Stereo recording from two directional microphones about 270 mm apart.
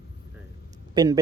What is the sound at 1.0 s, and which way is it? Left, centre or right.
Speech, centre.